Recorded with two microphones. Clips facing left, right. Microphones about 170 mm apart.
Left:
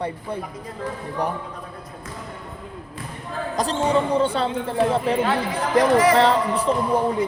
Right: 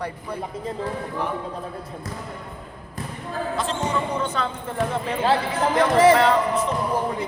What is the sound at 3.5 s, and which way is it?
Speech, 35° left (ahead or behind).